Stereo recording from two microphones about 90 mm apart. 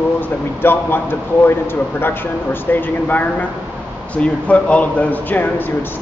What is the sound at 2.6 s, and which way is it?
Speech, 20° left (ahead or behind).